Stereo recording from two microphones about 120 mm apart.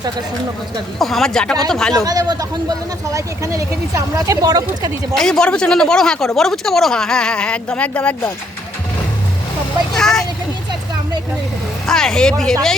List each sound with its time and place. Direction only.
0.9 s speech: centre (ahead or behind)
2.0 s speech: 30° right (ahead or behind)
5.1 s speech: 5° left (ahead or behind)
9.9 s speech: 5° left (ahead or behind)
11.9 s speech: 5° left (ahead or behind)